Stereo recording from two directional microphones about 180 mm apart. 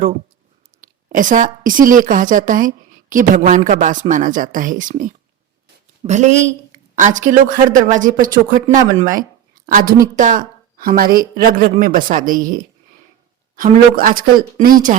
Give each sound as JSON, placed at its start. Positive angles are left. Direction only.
{"t": 0.8, "sound": "a woman's voice", "side_deg": -50}